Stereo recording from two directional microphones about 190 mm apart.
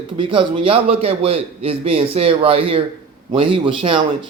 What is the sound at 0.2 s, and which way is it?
A man's voice, 25° right (ahead or behind).